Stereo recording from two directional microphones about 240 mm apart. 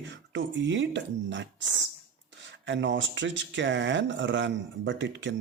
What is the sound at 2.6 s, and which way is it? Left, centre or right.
Speech, right.